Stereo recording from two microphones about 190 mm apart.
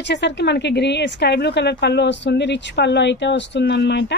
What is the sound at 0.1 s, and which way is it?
A woman's voice, 65° left (ahead or behind).